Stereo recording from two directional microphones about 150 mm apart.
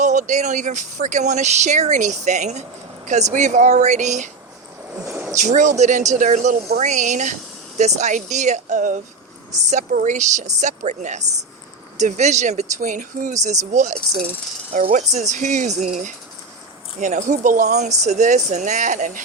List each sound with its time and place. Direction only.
0.0 s speech: 55° right (ahead or behind)
5.3 s speech: 50° right (ahead or behind)